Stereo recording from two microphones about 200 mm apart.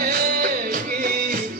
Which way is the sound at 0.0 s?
45° right (ahead or behind).